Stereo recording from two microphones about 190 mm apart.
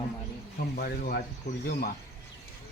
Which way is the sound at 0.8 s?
50° left (ahead or behind).